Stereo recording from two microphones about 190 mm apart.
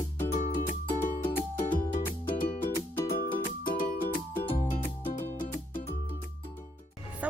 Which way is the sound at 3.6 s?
50° left (ahead or behind).